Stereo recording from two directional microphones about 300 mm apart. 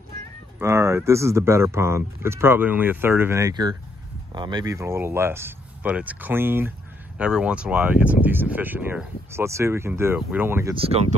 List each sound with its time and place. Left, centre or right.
0.6 s speech: centre
10.9 s speech: right